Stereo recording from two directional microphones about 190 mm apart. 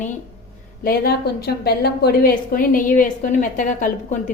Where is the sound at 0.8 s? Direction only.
55° left (ahead or behind).